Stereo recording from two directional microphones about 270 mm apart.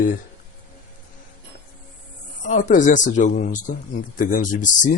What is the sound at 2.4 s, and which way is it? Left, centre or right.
Speech, left.